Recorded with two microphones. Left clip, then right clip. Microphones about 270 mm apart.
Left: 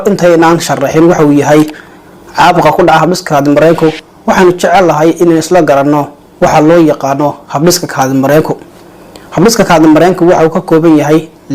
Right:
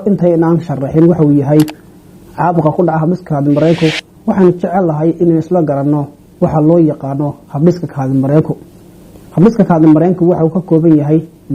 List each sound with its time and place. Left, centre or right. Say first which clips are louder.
0.0 s speech: left 6 dB; centre
3.8 s speech: left 4 dB; centre
4.6 s speech: left 8 dB; centre